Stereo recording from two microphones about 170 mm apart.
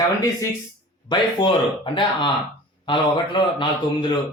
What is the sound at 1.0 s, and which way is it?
A man's voice, 30° left (ahead or behind).